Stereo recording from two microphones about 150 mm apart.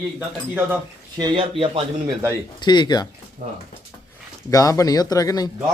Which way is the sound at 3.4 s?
65° right (ahead or behind).